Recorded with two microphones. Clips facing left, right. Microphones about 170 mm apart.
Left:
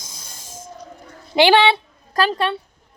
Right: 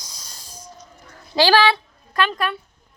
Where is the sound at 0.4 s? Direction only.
50° left (ahead or behind).